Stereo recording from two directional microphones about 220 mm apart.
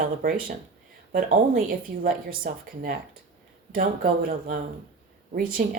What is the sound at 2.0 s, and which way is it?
Speech, 40° right (ahead or behind).